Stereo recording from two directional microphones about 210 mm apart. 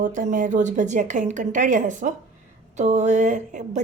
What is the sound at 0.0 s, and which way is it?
A woman's voice, 40° right (ahead or behind).